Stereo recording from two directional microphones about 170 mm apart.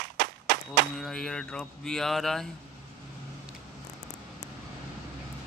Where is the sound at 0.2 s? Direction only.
75° right (ahead or behind).